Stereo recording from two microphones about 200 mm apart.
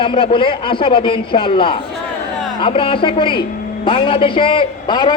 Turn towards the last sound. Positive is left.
turn(degrees=20)  # may be behind; listen again after turning